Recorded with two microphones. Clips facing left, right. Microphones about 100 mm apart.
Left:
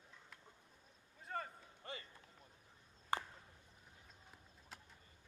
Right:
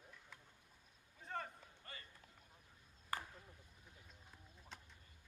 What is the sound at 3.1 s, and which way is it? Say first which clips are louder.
Chop: left 5 dB; 20° left (ahead or behind).